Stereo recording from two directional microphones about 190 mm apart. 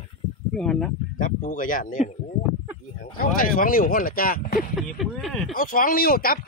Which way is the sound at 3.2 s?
50° left (ahead or behind).